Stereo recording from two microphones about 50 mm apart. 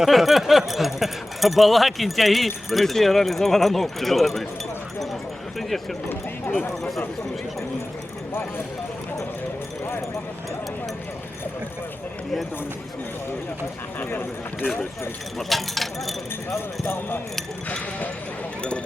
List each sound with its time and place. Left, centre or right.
0.0 s speech: centre
5.5 s speech: centre
8.3 s speech: left
14.0 s speech: left
15.4 s speech: centre
16.8 s speech: left